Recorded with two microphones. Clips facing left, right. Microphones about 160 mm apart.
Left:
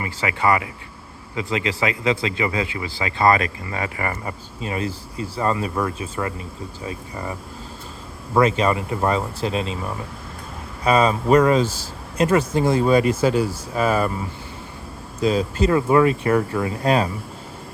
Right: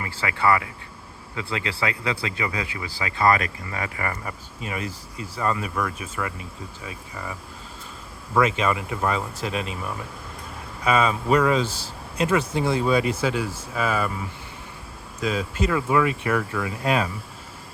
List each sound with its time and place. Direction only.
0.0 s speech: 15° left (ahead or behind); by 14.1 s 40° left (ahead or behind)
15.2 s speech: 35° left (ahead or behind)